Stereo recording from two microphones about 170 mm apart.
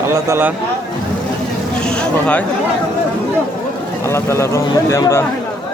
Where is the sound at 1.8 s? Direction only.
5° left (ahead or behind).